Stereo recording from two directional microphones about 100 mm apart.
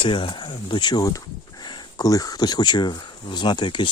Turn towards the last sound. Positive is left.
turn(degrees=50)  # may be behind; listen again after turning